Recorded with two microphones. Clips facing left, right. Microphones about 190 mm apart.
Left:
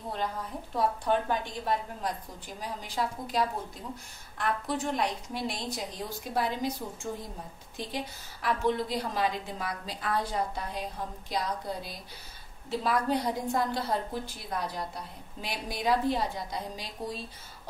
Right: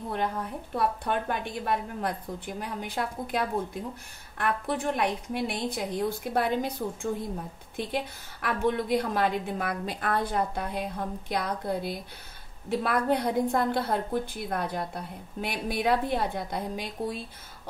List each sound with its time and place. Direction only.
0.7 s a woman's voice: 60° right (ahead or behind)